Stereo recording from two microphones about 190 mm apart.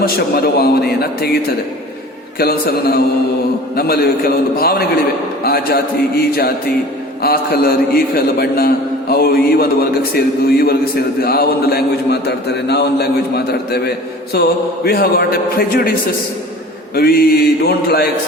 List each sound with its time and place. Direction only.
0.0 s a man's voice: 55° left (ahead or behind)
2.4 s a man's voice: 50° left (ahead or behind)